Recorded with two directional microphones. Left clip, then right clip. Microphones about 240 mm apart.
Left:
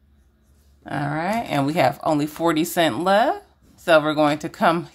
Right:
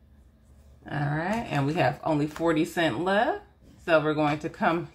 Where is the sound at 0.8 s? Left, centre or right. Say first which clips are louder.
Left 5 dB; left.